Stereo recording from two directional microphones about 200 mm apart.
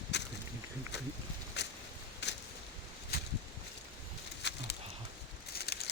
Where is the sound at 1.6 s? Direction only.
60° left (ahead or behind).